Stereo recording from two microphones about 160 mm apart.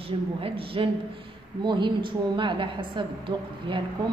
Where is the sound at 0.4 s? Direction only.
35° right (ahead or behind).